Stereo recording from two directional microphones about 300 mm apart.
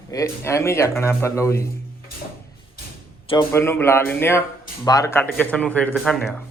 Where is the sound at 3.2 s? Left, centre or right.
Centre.